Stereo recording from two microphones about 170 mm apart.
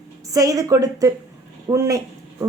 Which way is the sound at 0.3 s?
20° right (ahead or behind).